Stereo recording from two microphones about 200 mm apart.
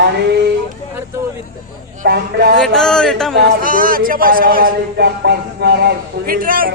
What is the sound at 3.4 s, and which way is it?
A man's voice, 45° right (ahead or behind).